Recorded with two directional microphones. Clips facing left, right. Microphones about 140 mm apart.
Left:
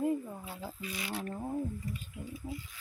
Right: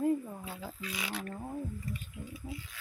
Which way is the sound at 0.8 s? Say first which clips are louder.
Right 1 dB; 90° right.